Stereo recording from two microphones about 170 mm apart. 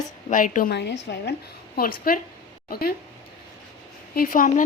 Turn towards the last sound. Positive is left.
turn(degrees=55)  # may be behind; listen again after turning